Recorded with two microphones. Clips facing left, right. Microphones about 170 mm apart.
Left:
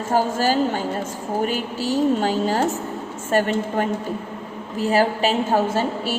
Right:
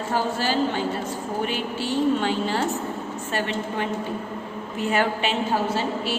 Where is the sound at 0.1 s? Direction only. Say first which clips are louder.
Left 5 dB; 45° left (ahead or behind).